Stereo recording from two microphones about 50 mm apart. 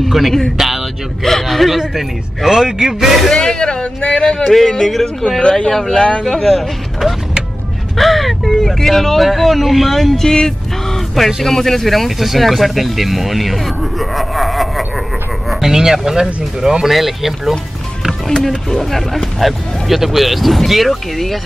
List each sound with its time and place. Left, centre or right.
0.0 s music: centre
0.6 s vehicle: centre
1.2 s a man's voice: centre
3.3 s speech: centre
11.1 s a man's voice: centre
18.0 s music: centre
18.7 s speech: centre